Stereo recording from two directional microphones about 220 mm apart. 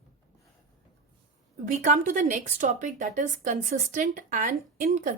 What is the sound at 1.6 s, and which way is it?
A woman's voice, 35° right (ahead or behind).